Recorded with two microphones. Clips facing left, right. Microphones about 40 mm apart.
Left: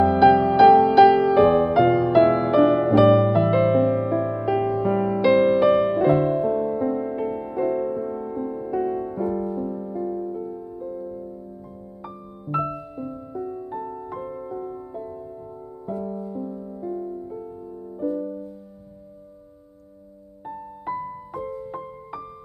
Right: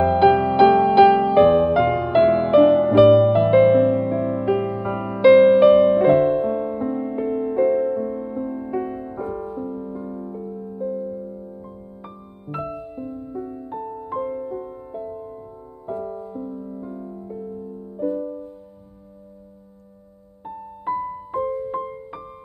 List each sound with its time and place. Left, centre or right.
0.0 s music: right; by 4.5 s centre
4.5 s music: right
7.7 s music: centre
9.3 s music: right; by 10.8 s centre
10.8 s music: centre
14.0 s music: right
15.9 s music: right
16.3 s music: centre
20.8 s music: centre